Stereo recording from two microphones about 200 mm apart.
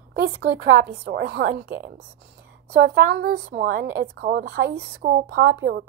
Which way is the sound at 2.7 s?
60° right (ahead or behind).